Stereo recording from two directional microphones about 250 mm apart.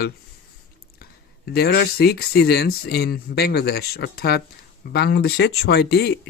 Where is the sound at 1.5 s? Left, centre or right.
Left.